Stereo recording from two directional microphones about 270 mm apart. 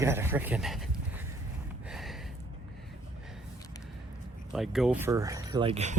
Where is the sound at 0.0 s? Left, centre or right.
Centre.